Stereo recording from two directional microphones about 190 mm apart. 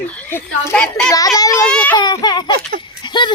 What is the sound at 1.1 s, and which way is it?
Speech, 20° left (ahead or behind).